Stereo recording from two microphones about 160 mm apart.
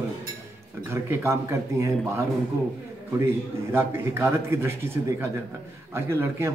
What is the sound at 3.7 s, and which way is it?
A man's voice, 15° right (ahead or behind).